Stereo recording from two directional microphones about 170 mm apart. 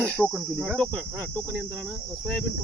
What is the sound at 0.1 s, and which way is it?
Cricket, 5° left (ahead or behind).